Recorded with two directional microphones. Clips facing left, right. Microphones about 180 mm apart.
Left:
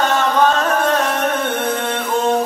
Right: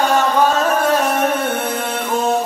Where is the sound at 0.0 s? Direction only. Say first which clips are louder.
Even; 10° right (ahead or behind).